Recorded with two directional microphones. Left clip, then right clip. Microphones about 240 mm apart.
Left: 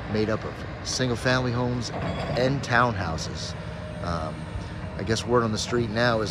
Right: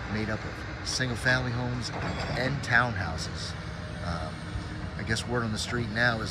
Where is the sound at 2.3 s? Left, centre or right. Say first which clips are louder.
Left 3 dB; centre.